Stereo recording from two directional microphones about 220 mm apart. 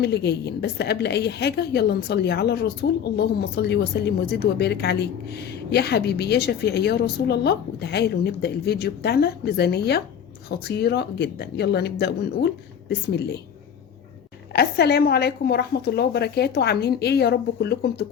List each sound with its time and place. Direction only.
0.0 s a woman's voice: 50° left (ahead or behind)
14.5 s a woman's voice: 45° left (ahead or behind)